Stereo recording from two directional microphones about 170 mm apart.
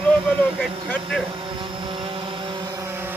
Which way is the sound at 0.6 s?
Centre (ahead or behind).